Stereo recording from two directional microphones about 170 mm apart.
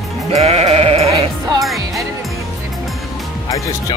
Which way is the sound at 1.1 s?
20° right (ahead or behind).